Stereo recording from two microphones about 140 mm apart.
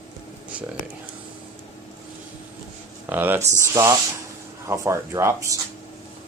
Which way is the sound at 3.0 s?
15° right (ahead or behind).